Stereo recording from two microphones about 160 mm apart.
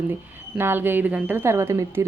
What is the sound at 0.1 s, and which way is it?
A woman's voice, 15° right (ahead or behind).